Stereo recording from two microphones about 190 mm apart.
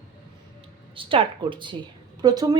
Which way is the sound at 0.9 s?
30° right (ahead or behind).